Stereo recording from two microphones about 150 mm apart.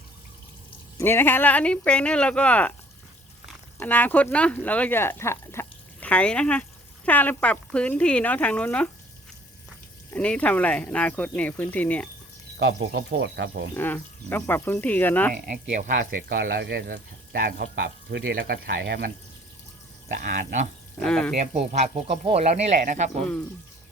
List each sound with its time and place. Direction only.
0.9 s speech: 15° left (ahead or behind)
3.8 s speech: 10° left (ahead or behind)
10.1 s speech: 10° left (ahead or behind)
12.9 s speech: 90° right
13.7 s speech: 15° left (ahead or behind)
15.4 s speech: 55° right (ahead or behind); by 19.1 s 90° right
20.1 s speech: 60° right (ahead or behind)
21.0 s speech: 5° left (ahead or behind)
21.5 s speech: 50° right (ahead or behind)
23.2 s speech: 10° left (ahead or behind)